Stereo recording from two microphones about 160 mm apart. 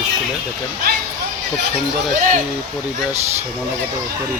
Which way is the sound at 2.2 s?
55° right (ahead or behind).